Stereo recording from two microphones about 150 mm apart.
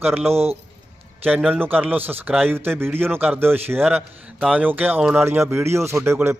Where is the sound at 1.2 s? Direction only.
10° right (ahead or behind).